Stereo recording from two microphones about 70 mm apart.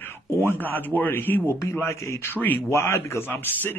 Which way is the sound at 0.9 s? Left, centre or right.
Left.